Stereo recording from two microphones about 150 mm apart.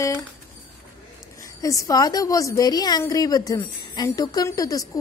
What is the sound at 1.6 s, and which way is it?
A woman's voice, 20° left (ahead or behind).